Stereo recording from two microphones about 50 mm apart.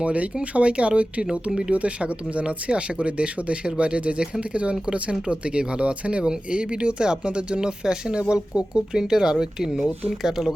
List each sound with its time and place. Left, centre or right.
0.0 s speech: right
1.7 s speech: right; by 10.5 s centre